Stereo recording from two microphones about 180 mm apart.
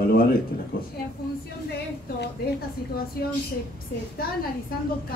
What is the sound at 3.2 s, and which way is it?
Speech, 60° left (ahead or behind).